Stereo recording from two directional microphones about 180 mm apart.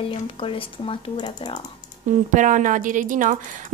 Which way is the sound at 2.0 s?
45° right (ahead or behind).